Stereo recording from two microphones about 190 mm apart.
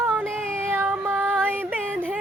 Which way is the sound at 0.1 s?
10° right (ahead or behind).